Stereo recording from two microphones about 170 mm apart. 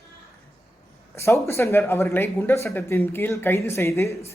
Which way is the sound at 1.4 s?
15° left (ahead or behind).